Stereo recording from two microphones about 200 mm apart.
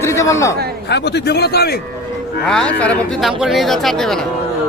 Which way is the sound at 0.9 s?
55° left (ahead or behind).